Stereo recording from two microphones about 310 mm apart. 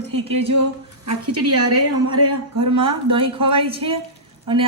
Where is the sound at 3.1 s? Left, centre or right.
Centre.